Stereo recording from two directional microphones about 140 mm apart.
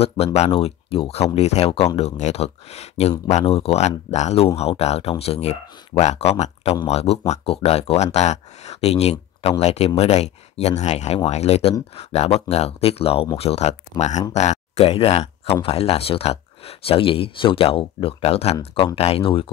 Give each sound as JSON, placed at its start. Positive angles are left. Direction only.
{"t": 0.0, "sound": "speech", "side_deg": 45}